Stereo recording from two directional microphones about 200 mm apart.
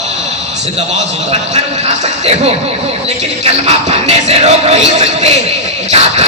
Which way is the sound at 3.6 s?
35° right (ahead or behind).